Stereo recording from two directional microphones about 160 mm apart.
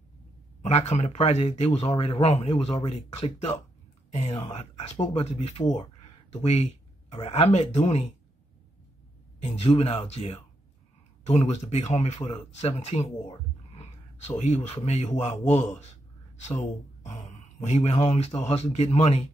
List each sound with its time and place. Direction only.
0.6 s speech: 45° left (ahead or behind)
9.4 s speech: 40° left (ahead or behind)
17.0 s a sound: 45° left (ahead or behind)
17.6 s speech: 40° left (ahead or behind)